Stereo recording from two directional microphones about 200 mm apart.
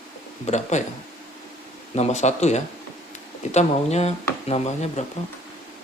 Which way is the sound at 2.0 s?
35° left (ahead or behind).